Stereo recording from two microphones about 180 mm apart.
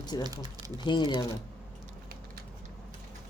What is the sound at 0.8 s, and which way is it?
Speech, 25° left (ahead or behind).